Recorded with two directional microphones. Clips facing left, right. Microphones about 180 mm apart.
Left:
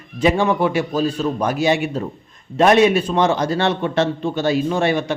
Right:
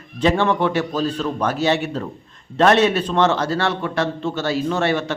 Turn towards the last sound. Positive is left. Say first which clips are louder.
# left 2 dB
turn(degrees=15)  # may be behind; listen again after turning